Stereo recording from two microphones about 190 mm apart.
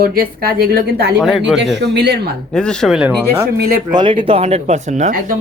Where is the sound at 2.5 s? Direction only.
5° left (ahead or behind).